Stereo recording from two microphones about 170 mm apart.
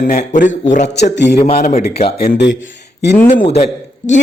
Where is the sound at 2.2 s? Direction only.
75° left (ahead or behind).